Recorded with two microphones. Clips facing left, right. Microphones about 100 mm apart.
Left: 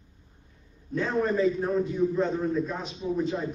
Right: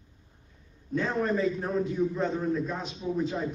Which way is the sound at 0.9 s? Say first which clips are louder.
Left 1 dB; centre (ahead or behind).